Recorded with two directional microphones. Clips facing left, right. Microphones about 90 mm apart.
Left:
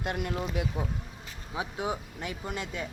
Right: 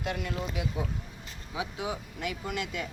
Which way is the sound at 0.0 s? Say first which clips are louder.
Left 1 dB; 45° left (ahead or behind).